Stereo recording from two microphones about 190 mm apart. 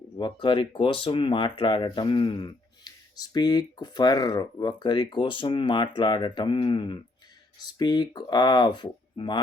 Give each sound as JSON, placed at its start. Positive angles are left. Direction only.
{"t": 0.2, "sound": "speech", "side_deg": 25}